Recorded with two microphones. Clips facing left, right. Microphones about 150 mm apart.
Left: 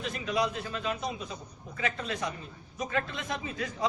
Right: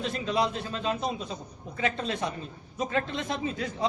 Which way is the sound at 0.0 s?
30° right (ahead or behind).